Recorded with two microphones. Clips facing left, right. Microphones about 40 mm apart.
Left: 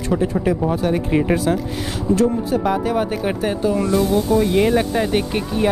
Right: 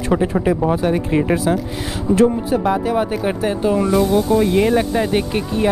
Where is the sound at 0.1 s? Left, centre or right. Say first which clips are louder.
Right 2 dB; centre.